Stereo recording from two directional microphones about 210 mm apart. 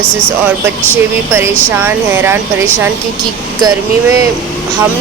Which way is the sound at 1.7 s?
10° right (ahead or behind).